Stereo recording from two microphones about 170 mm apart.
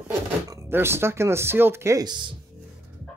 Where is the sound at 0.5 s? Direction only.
15° right (ahead or behind).